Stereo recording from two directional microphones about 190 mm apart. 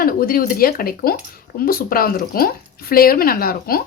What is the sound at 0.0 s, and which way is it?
Speech, 50° left (ahead or behind).